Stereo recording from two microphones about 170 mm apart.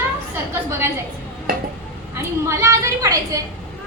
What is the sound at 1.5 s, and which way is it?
Stir, 55° right (ahead or behind).